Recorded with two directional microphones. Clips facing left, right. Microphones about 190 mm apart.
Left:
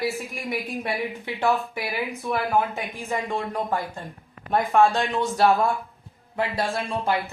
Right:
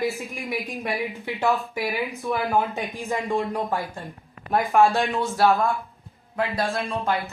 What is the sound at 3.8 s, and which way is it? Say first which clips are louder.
Speech: even; centre (ahead or behind).